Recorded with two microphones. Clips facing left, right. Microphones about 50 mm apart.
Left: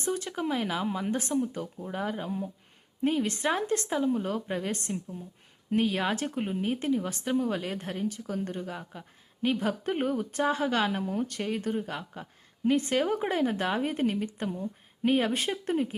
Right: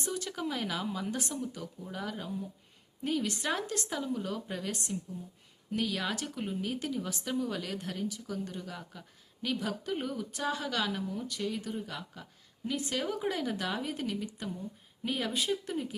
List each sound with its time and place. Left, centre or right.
0.0 s speech: left
0.3 s speech: left